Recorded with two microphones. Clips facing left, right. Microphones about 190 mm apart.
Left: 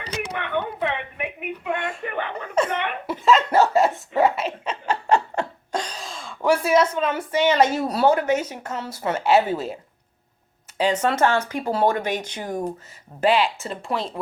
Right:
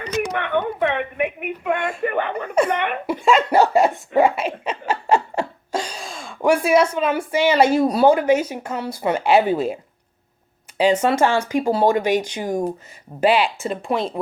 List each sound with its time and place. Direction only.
0.3 s speech: 55° right (ahead or behind)
2.6 s chuckle: 60° right (ahead or behind)
3.1 s speech: 10° right (ahead or behind)
10.8 s speech: 10° right (ahead or behind)